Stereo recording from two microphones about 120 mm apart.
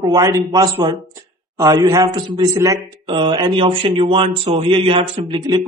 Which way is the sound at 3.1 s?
45° right (ahead or behind).